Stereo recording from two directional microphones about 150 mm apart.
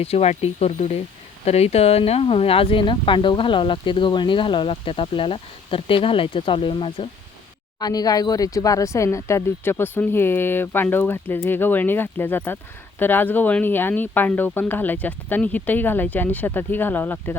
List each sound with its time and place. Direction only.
0.0 s speech: 45° left (ahead or behind); by 17.3 s 15° left (ahead or behind)